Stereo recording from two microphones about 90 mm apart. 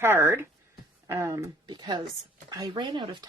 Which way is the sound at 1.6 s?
55° right (ahead or behind).